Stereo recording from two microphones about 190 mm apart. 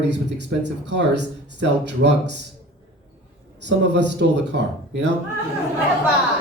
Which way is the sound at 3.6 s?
65° right (ahead or behind).